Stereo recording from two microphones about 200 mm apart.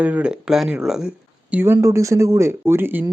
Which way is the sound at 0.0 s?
5° right (ahead or behind).